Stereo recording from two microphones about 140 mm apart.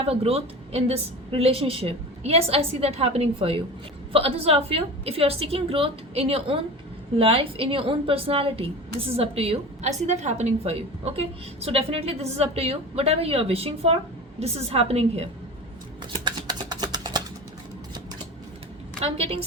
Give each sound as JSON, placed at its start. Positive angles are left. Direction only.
{"t": 0.0, "sound": "a woman's voice", "side_deg": -45}
{"t": 16.2, "sound": "a sound", "side_deg": -30}
{"t": 19.0, "sound": "a woman's voice", "side_deg": -45}